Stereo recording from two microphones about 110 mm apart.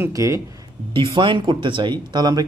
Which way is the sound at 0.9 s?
50° right (ahead or behind).